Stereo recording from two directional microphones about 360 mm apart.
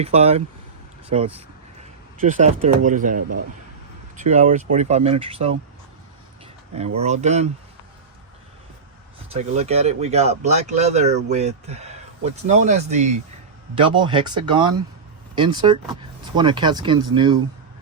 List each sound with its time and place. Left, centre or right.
0.0 s speech: centre
4.2 s speech: centre
6.7 s speech: centre
9.3 s speech: centre